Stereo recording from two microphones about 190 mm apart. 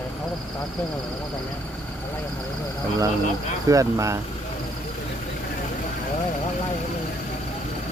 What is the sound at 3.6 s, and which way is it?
Speech, 15° right (ahead or behind).